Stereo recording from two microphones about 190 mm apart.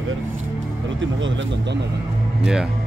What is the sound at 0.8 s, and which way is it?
Speech, 90° right.